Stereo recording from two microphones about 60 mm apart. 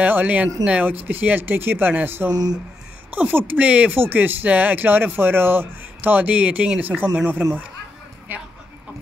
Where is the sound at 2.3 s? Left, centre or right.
Right.